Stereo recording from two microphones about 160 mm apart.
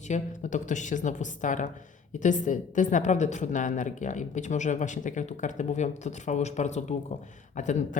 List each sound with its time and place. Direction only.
0.1 s a woman's voice: 50° left (ahead or behind)